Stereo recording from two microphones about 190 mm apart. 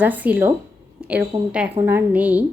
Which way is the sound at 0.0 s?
10° right (ahead or behind).